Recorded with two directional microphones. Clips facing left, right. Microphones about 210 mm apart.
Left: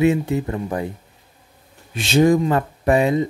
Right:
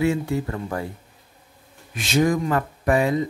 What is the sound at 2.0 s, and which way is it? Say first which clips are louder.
Speech: left 5 dB; 25° left (ahead or behind).